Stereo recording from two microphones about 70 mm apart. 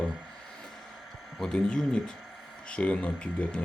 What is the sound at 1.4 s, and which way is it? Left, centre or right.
Speech, centre.